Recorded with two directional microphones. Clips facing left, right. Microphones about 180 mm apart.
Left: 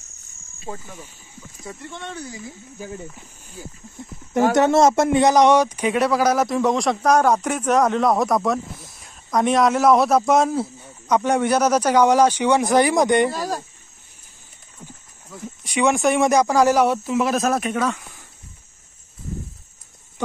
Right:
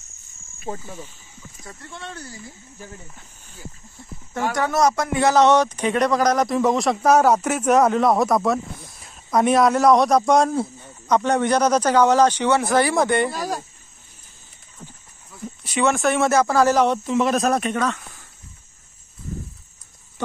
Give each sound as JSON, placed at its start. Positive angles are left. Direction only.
{"t": 0.7, "sound": "speech", "side_deg": -40}
{"t": 1.6, "sound": "speech", "side_deg": 0}
{"t": 2.1, "sound": "speech", "side_deg": 10}
{"t": 4.0, "sound": "speech", "side_deg": 20}
{"t": 13.3, "sound": "speech", "side_deg": -10}
{"t": 15.6, "sound": "speech", "side_deg": 15}